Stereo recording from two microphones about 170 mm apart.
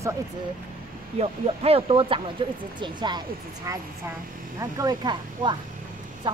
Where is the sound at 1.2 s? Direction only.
35° right (ahead or behind).